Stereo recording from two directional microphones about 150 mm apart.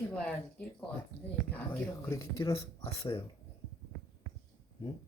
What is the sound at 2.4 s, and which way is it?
Speech, 35° left (ahead or behind).